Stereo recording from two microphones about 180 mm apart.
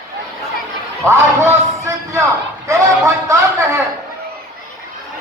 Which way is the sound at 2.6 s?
15° right (ahead or behind).